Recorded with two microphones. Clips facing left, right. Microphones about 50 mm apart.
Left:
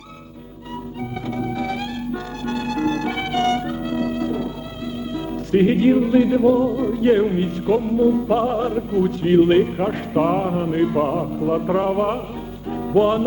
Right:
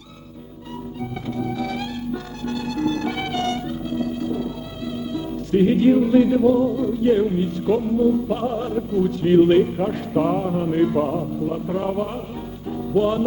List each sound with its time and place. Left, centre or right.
1.6 s music: left
2.4 s music: left
3.1 s music: left
3.8 s music: left
5.5 s music: left
5.9 s a man's voice: centre
6.8 s music: left
7.7 s a man's voice: left
10.6 s a sound: centre
11.0 s music: left
12.9 s speech: left